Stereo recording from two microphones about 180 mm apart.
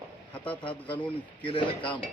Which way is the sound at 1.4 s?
30° left (ahead or behind).